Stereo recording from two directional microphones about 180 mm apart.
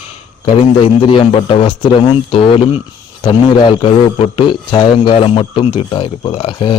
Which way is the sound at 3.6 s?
30° left (ahead or behind).